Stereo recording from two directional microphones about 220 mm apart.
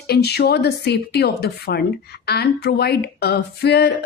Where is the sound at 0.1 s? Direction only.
45° left (ahead or behind).